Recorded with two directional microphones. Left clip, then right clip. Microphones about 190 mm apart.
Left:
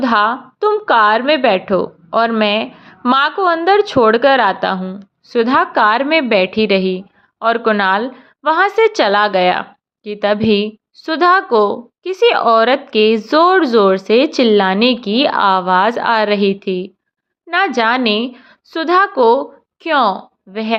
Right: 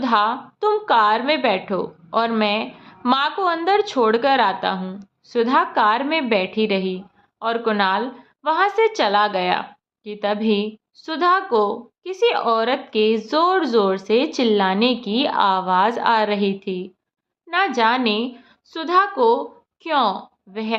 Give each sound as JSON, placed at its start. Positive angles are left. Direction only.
{"t": 0.0, "sound": "a woman's voice", "side_deg": 25}
{"t": 4.8, "sound": "a woman's voice", "side_deg": 20}